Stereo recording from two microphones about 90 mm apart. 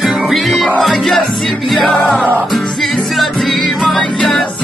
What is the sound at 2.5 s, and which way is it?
Music, centre (ahead or behind).